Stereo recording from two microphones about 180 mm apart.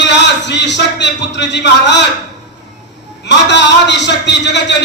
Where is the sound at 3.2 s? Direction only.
75° left (ahead or behind).